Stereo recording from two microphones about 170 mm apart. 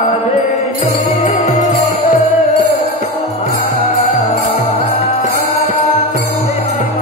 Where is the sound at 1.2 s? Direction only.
45° left (ahead or behind).